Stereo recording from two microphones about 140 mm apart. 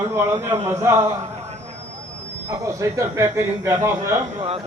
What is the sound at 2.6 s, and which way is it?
A man's voice, 20° right (ahead or behind).